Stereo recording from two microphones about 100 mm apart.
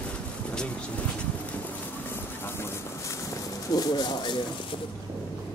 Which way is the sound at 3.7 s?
45° left (ahead or behind).